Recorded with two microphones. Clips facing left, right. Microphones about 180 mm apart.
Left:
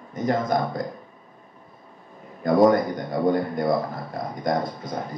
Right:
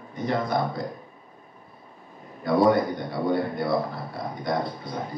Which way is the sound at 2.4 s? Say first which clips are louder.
Left 3 dB; 45° left (ahead or behind).